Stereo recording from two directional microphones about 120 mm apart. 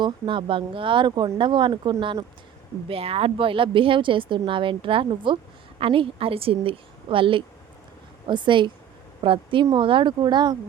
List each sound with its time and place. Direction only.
0.0 s speech: 45° right (ahead or behind)
2.9 s speech: 55° right (ahead or behind); by 10.6 s 40° right (ahead or behind)